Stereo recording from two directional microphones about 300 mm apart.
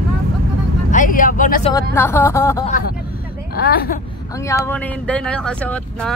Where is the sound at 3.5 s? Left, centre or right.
Left.